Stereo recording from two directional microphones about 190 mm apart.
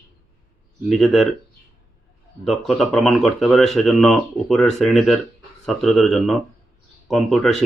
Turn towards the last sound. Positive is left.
turn(degrees=0)  # may be behind; listen again after turning